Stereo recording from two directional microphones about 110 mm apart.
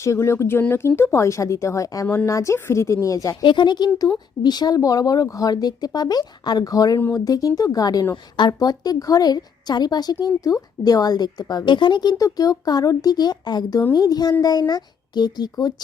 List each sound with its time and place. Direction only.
0.0 s speech: 25° left (ahead or behind)
3.4 s a woman's voice: 45° left (ahead or behind)